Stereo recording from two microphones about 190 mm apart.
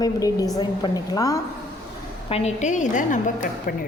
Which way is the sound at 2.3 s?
35° left (ahead or behind).